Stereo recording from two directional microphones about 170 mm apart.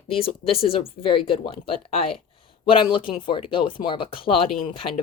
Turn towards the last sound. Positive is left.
turn(degrees=30)  # may be behind; listen again after turning